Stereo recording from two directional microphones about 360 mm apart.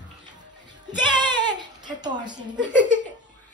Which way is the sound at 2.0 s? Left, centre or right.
Centre.